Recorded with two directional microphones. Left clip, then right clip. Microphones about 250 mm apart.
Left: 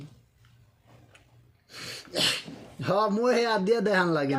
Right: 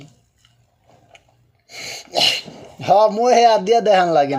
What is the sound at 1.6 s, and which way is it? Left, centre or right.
Sneeze, centre.